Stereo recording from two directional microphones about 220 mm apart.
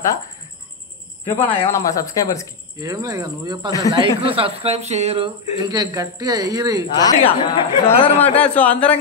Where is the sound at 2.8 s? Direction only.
15° right (ahead or behind).